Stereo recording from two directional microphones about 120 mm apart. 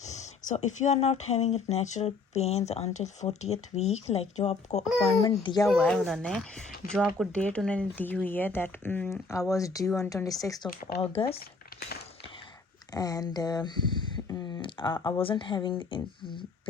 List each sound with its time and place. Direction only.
0.0 s speech: 70° left (ahead or behind)
5.2 s speech: 40° left (ahead or behind)
5.8 s speech: centre (ahead or behind)
9.3 s speech: 25° left (ahead or behind)
11.0 s speech: 55° left (ahead or behind)
12.9 s speech: 30° left (ahead or behind)
14.3 s a sound: 30° left (ahead or behind)
14.6 s speech: 40° left (ahead or behind)